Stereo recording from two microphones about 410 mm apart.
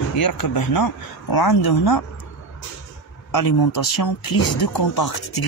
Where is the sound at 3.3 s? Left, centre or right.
Left.